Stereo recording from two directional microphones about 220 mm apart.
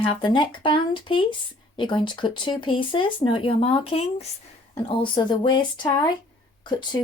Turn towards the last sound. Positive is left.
turn(degrees=20)  # may be behind; listen again after turning